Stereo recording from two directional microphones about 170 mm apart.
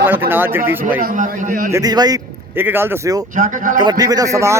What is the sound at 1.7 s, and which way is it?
A man's voice, 20° right (ahead or behind).